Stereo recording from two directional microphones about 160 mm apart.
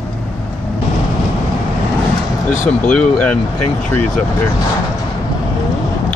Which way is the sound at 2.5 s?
55° left (ahead or behind).